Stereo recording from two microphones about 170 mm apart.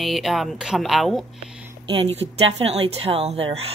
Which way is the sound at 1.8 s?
35° right (ahead or behind).